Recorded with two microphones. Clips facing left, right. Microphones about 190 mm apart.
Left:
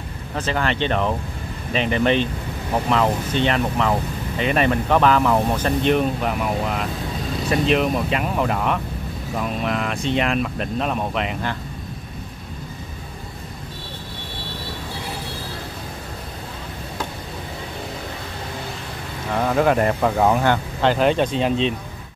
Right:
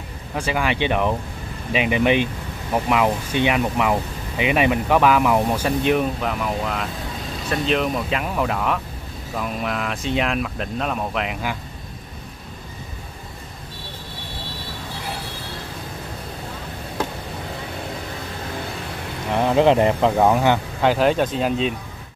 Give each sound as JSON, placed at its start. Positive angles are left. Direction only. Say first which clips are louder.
{"t": 0.3, "sound": "speech", "louder": "even", "side_deg": -10}
{"t": 19.3, "sound": "speech", "louder": "right 2 dB", "side_deg": -20}
{"t": 20.2, "sound": "speech", "louder": "right 1 dB", "side_deg": -10}